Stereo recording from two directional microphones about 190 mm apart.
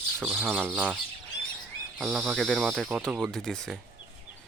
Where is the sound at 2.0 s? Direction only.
5° right (ahead or behind).